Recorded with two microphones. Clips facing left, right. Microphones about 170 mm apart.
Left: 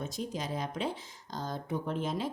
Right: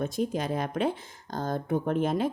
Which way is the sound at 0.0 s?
55° right (ahead or behind).